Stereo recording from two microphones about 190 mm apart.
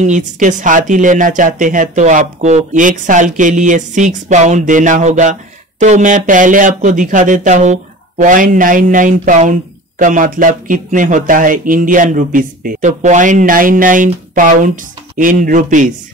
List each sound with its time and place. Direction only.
0.0 s speech: 40° right (ahead or behind)